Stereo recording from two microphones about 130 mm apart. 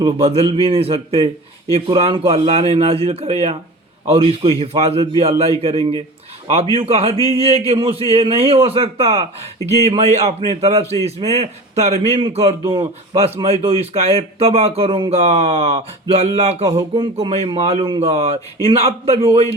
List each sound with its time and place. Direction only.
0.2 s a man's voice: 50° right (ahead or behind)
16.9 s a man's voice: 45° right (ahead or behind)